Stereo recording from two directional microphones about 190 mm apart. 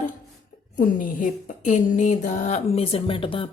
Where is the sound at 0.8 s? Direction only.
45° left (ahead or behind).